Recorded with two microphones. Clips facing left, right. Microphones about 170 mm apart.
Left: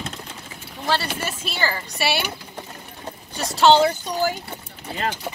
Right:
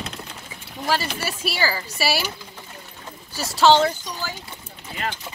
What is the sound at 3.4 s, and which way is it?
Speech, centre (ahead or behind).